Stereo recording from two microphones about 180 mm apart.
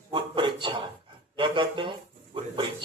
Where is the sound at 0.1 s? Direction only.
25° right (ahead or behind).